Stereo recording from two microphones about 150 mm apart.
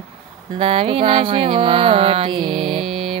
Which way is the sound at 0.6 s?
40° right (ahead or behind).